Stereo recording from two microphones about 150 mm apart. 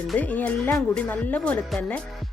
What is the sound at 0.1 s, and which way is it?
Speech, 10° left (ahead or behind).